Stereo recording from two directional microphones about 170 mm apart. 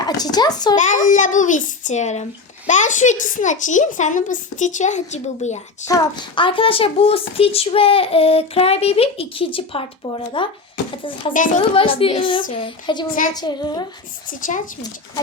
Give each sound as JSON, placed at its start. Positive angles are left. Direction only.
{"t": 0.0, "sound": "speech", "side_deg": 25}
{"t": 1.0, "sound": "a child's voice", "side_deg": 50}
{"t": 5.9, "sound": "a woman's voice", "side_deg": 25}
{"t": 11.3, "sound": "a child's voice", "side_deg": 50}
{"t": 11.7, "sound": "a woman's voice", "side_deg": 30}
{"t": 14.4, "sound": "a child's voice", "side_deg": 50}